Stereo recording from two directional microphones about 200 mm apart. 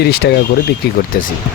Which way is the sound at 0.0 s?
55° left (ahead or behind).